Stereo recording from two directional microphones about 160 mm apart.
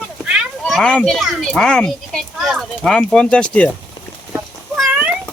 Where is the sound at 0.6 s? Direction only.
5° left (ahead or behind).